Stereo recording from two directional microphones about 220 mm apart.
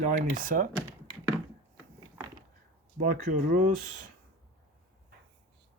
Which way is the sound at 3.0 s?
35° right (ahead or behind).